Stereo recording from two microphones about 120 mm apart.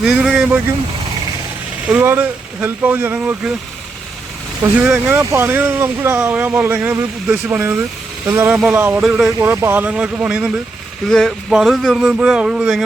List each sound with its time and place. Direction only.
0.0 s speech: 5° right (ahead or behind)
1.9 s speech: 15° right (ahead or behind)
4.8 s speech: 10° right (ahead or behind)
9.4 s speech: 20° right (ahead or behind)
11.1 s a man's voice: 5° left (ahead or behind)